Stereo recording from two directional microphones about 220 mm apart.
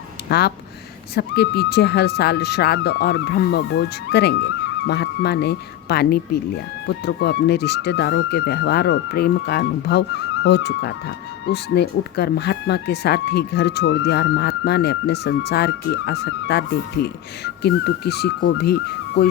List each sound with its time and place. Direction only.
0.3 s speech: 45° left (ahead or behind)